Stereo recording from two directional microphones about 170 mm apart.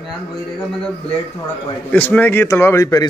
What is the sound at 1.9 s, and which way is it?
Speech, 10° left (ahead or behind).